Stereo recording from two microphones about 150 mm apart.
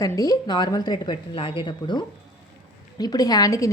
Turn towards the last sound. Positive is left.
turn(degrees=25)  # may be behind; listen again after turning